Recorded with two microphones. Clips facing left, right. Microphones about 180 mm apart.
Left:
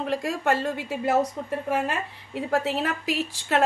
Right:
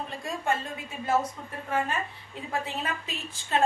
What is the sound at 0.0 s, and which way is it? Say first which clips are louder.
A woman's voice: left 7 dB; 85° left.